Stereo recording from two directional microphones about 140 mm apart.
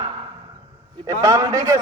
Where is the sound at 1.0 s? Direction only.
25° right (ahead or behind).